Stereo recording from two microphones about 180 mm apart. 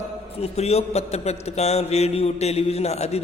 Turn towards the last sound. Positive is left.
turn(degrees=35)  # may be behind; listen again after turning